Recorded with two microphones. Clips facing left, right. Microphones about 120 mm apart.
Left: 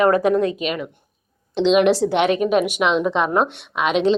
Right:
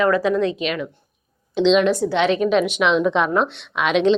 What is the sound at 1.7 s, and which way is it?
Speech, 80° left.